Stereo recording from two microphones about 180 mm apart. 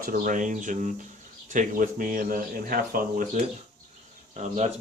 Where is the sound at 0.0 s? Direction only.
50° right (ahead or behind).